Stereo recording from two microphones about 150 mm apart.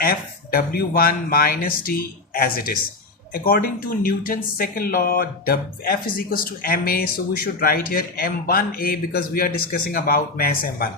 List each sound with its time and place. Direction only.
0.0 s speech: 85° left